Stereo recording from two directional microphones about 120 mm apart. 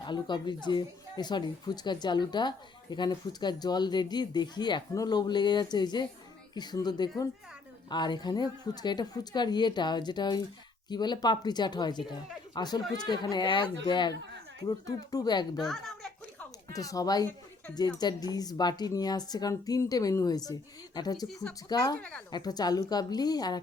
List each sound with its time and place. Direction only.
0.0 s speech: 40° left (ahead or behind)
15.5 s speech: centre (ahead or behind)
16.7 s speech: 30° left (ahead or behind)